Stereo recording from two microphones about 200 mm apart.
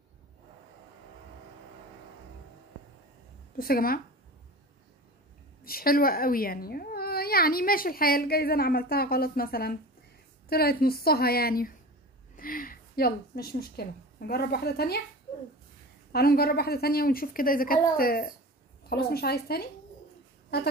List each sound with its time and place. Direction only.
3.5 s speech: 45° left (ahead or behind)
5.6 s a woman's voice: 50° left (ahead or behind)
16.1 s speech: 50° left (ahead or behind)